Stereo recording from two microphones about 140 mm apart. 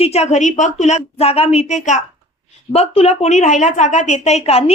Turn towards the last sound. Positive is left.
turn(degrees=50)  # may be behind; listen again after turning